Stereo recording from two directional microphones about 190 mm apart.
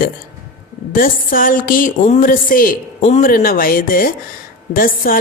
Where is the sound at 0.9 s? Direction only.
45° left (ahead or behind).